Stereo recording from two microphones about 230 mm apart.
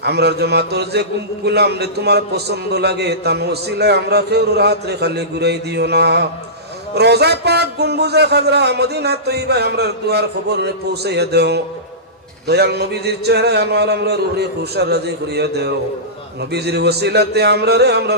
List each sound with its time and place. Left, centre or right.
0.0 s a man's voice: right